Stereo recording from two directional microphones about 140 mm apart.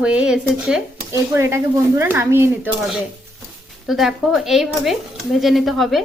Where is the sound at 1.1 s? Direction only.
20° right (ahead or behind).